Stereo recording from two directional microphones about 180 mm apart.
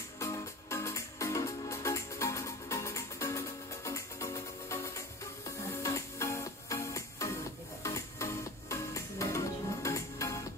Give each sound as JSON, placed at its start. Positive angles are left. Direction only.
{"t": 0.2, "sound": "music", "side_deg": 15}